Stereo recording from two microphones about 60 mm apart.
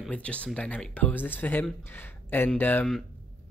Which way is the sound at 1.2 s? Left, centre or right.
Left.